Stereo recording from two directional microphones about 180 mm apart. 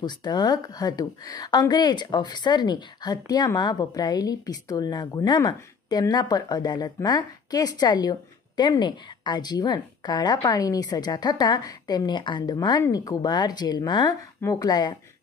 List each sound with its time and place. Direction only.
0.0 s a woman's voice: 25° left (ahead or behind)